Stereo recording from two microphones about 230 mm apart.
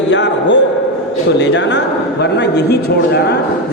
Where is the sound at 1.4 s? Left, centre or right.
Left.